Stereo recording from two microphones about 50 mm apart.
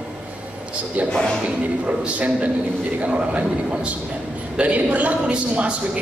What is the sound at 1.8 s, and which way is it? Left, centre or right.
A woman's voice, right.